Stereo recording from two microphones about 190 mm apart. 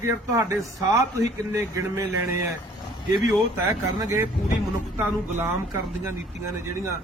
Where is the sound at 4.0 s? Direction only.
15° right (ahead or behind).